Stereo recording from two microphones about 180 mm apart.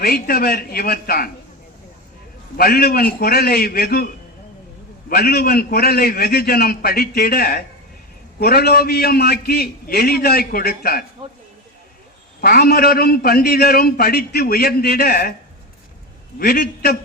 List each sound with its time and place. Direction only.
0.0 s a man's voice: 55° left (ahead or behind)
2.6 s a man's voice: 55° left (ahead or behind)
12.4 s a man's voice: 60° left (ahead or behind)
16.4 s a man's voice: 60° left (ahead or behind)